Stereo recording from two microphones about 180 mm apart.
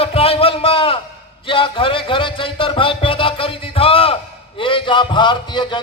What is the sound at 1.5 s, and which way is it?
Music, 30° left (ahead or behind).